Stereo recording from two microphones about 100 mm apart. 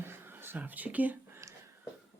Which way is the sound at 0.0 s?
25° right (ahead or behind).